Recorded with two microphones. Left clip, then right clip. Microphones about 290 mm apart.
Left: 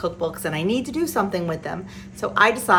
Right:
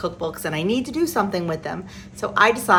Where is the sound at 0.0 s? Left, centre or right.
Centre.